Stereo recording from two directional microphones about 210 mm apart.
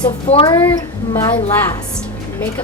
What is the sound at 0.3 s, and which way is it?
Speech, 25° left (ahead or behind).